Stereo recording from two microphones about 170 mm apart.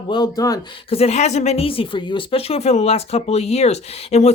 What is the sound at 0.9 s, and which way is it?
Speech, 35° left (ahead or behind).